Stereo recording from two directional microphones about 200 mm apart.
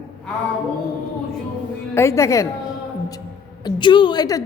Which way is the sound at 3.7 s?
25° left (ahead or behind).